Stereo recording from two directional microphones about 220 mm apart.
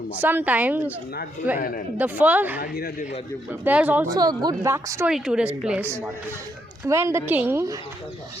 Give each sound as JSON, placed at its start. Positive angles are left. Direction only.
{"t": 0.2, "sound": "a woman's voice", "side_deg": -10}
{"t": 1.5, "sound": "speech", "side_deg": 40}
{"t": 2.0, "sound": "a woman's voice", "side_deg": -5}
{"t": 2.6, "sound": "speech", "side_deg": 45}
{"t": 3.5, "sound": "a woman's voice", "side_deg": -10}
{"t": 4.1, "sound": "a woman's voice", "side_deg": -20}